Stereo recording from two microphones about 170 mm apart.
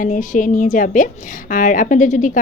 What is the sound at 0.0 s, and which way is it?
Speech, 50° left (ahead or behind).